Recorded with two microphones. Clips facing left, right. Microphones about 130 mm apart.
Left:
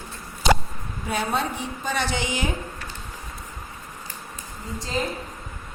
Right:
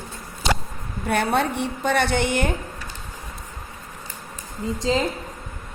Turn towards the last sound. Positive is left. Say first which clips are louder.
# right 6 dB
turn(degrees=-90)